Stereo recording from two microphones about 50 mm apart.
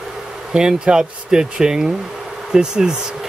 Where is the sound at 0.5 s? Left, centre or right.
Centre.